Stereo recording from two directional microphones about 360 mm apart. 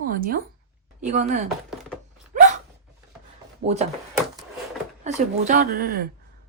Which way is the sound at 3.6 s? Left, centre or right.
Centre.